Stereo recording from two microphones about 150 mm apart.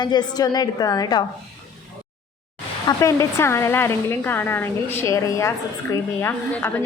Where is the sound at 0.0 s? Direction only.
30° left (ahead or behind).